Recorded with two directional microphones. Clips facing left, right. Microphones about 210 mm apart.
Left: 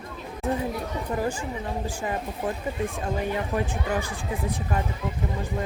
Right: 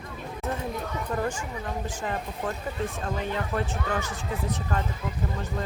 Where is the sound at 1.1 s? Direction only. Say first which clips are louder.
Left 2 dB; 10° left (ahead or behind).